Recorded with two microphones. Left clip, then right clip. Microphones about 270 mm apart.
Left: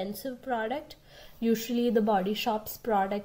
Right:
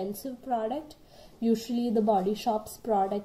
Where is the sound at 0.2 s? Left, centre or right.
Left.